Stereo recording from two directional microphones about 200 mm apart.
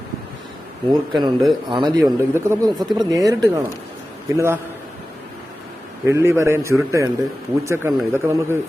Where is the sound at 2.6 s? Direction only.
Centre (ahead or behind).